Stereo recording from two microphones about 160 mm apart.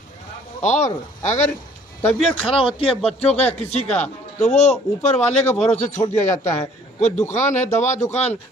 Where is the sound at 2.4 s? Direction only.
35° left (ahead or behind).